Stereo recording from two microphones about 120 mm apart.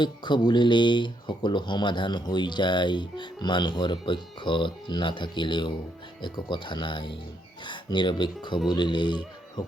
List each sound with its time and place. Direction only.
0.0 s speech: 40° left (ahead or behind)